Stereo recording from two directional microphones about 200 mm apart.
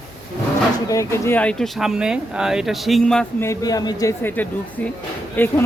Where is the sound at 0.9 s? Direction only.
15° left (ahead or behind).